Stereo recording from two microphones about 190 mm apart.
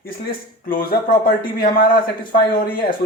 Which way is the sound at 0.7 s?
45° left (ahead or behind).